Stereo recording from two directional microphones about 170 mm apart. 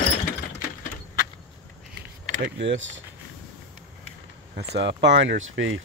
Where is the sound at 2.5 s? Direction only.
90° right.